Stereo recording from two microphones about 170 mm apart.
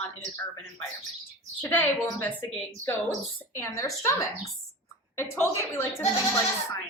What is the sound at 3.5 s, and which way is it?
Speech, 15° left (ahead or behind).